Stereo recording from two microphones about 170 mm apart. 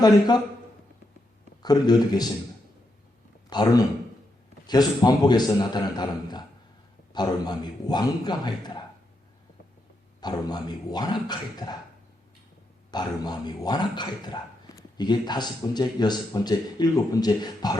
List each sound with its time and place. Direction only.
0.0 s a man's voice: 25° left (ahead or behind)
1.6 s a man's voice: 25° left (ahead or behind)
3.5 s a man's voice: 25° left (ahead or behind)
10.2 s a man's voice: 25° left (ahead or behind)
12.9 s a man's voice: 25° left (ahead or behind)